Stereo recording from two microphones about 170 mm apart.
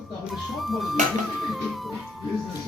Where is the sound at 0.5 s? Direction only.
Centre (ahead or behind).